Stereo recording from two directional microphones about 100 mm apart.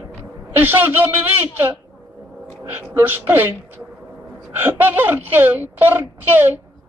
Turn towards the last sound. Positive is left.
turn(degrees=-20)  # may be behind; listen again after turning